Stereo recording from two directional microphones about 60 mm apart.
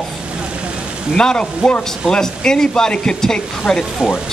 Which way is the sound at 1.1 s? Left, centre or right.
Centre.